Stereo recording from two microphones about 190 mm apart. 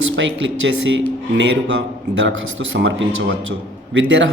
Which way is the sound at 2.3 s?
80° right.